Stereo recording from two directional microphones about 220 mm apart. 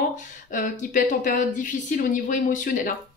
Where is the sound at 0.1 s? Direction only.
35° left (ahead or behind).